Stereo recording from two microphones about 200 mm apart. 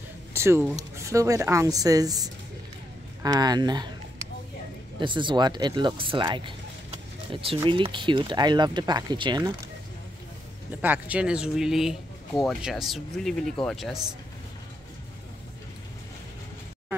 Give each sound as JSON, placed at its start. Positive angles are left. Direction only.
{"t": 0.3, "sound": "a woman's voice", "side_deg": -15}
{"t": 5.0, "sound": "speech", "side_deg": -25}
{"t": 10.8, "sound": "speech", "side_deg": -10}